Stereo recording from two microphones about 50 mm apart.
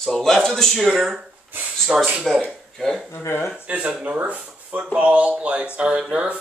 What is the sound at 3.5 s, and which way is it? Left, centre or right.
Speech, right.